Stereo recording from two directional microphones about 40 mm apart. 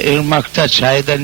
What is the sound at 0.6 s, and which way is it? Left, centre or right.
Speech, left.